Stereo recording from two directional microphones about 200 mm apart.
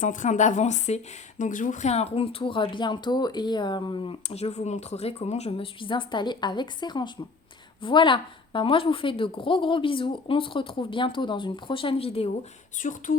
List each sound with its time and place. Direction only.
0.0 s speech: 40° left (ahead or behind)
12.8 s speech: 40° left (ahead or behind)